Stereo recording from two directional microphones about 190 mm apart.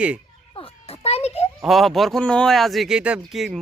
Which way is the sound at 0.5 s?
30° left (ahead or behind).